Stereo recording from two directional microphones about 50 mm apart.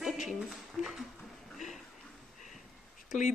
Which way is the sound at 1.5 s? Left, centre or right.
Centre.